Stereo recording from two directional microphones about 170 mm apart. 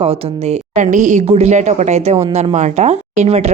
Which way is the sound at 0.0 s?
35° right (ahead or behind).